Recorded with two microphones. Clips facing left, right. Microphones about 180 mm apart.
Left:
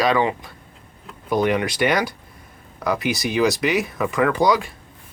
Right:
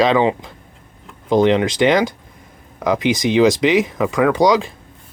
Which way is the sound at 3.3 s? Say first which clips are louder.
Right 6 dB; 20° right (ahead or behind).